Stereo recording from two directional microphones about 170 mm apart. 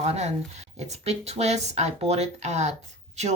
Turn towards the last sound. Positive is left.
turn(degrees=-40)  # may be behind; listen again after turning